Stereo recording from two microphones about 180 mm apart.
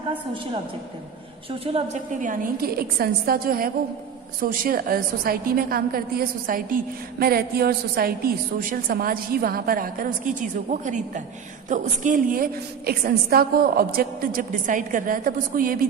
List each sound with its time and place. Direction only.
1.6 s a woman's voice: 30° right (ahead or behind)
2.2 s a woman's voice: 50° right (ahead or behind)